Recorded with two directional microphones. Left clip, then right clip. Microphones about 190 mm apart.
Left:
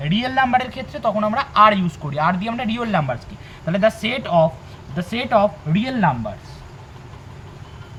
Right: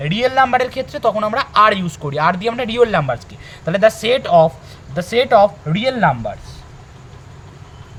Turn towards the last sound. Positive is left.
turn(degrees=-60)  # may be behind; listen again after turning